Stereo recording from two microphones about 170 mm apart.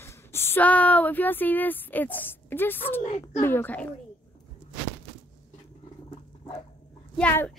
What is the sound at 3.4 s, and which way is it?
Speech, 10° left (ahead or behind).